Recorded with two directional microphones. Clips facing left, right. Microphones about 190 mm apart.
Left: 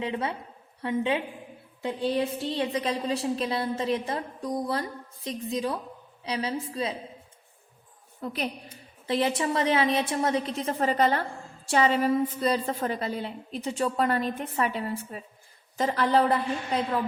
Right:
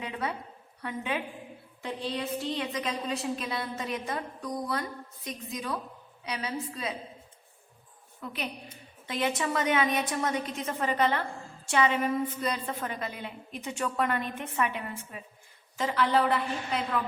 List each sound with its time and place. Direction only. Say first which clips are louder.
0.0 s a woman's voice: left 4 dB; 25° left (ahead or behind)
8.2 s a woman's voice: left 5 dB; 40° left (ahead or behind)